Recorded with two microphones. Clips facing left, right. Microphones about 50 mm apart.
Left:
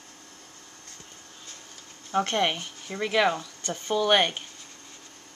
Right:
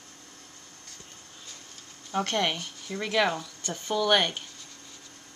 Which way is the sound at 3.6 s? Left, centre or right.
Left.